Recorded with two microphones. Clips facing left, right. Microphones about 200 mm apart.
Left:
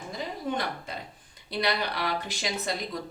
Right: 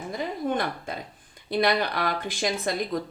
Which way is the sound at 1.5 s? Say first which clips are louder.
Right 5 dB; 50° right (ahead or behind).